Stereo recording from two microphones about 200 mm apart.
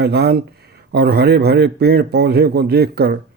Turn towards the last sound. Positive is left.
turn(degrees=-55)  # may be behind; listen again after turning